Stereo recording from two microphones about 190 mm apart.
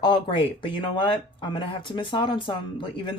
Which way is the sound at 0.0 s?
25° left (ahead or behind).